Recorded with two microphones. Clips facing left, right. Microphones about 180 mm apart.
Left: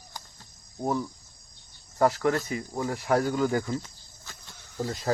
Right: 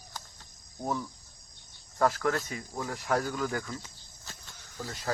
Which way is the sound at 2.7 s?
15° left (ahead or behind).